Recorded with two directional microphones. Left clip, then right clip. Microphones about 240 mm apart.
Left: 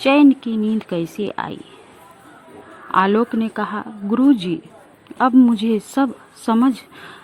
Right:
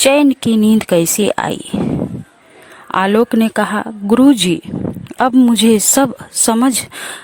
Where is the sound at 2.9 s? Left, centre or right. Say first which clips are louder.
Right 3 dB; right.